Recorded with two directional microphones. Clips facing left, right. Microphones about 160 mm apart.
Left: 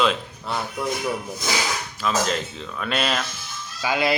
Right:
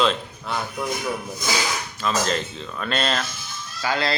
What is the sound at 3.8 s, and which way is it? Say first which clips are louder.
Fowl: left 2 dB; 15° left (ahead or behind).